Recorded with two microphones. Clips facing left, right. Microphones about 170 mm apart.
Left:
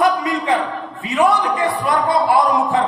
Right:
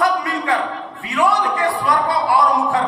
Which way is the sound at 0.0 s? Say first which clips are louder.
Left 2 dB; 20° left (ahead or behind).